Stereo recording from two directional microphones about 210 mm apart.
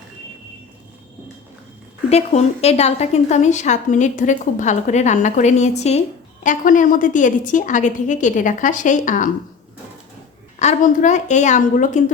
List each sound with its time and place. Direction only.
2.0 s a woman's voice: 30° left (ahead or behind)
10.6 s a woman's voice: 35° left (ahead or behind)